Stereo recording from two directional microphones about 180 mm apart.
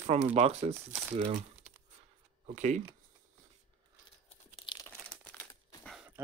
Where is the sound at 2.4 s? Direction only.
40° right (ahead or behind).